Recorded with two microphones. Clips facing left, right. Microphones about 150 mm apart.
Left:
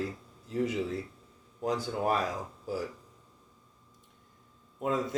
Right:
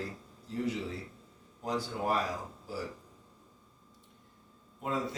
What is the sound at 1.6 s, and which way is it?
Speech, 50° left (ahead or behind).